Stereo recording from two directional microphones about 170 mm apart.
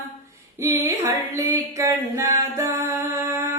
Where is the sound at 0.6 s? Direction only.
20° right (ahead or behind).